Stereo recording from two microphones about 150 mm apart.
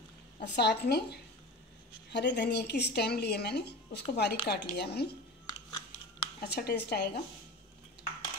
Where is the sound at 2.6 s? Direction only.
90° left.